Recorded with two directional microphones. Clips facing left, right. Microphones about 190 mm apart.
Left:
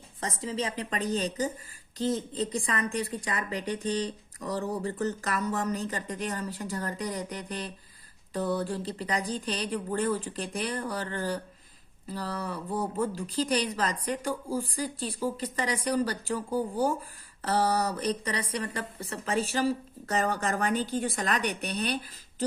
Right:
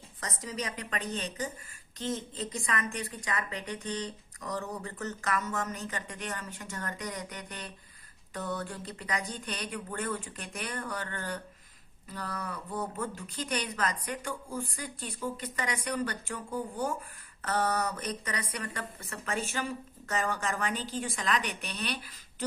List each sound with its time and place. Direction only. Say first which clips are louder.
0.2 s a woman's voice: left 5 dB; 30° left (ahead or behind)